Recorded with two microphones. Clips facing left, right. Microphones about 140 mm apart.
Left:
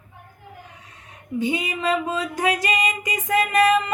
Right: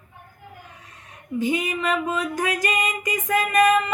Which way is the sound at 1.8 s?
30° left (ahead or behind).